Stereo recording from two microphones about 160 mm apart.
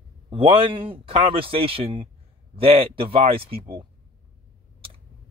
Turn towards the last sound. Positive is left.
turn(degrees=-35)  # may be behind; listen again after turning